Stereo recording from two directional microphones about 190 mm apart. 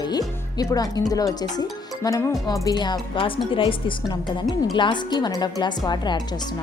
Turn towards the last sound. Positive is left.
turn(degrees=20)  # may be behind; listen again after turning